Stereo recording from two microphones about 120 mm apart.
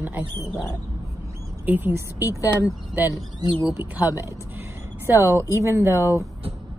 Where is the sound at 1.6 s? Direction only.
15° right (ahead or behind).